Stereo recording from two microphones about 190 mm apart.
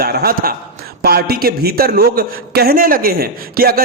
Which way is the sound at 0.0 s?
55° right (ahead or behind).